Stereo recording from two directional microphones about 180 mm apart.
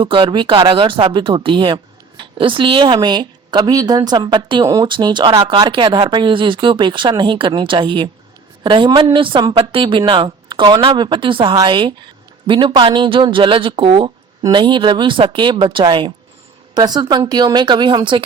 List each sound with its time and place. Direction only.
0.0 s speech: 30° right (ahead or behind)